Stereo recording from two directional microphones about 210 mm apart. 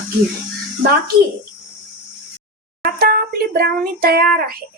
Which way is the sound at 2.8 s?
45° right (ahead or behind).